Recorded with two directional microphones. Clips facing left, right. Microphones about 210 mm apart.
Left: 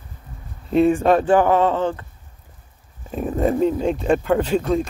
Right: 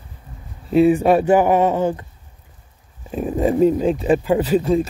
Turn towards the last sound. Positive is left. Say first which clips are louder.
# right 3 dB
turn(degrees=-5)  # may be behind; listen again after turning